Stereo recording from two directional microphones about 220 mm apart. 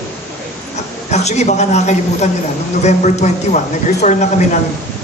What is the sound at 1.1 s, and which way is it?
A man's voice, 30° left (ahead or behind).